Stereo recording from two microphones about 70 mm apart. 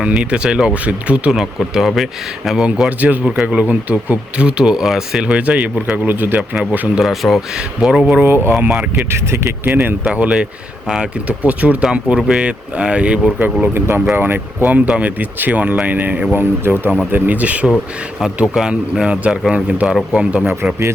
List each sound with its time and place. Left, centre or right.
0.0 s speech: centre
1.4 s speech: centre
7.0 s speech: centre
7.8 s speech: centre
8.2 s speech: right
9.6 s speech: right
10.1 s speech: centre
11.3 s speech: right
13.4 s speech: right
18.5 s speech: centre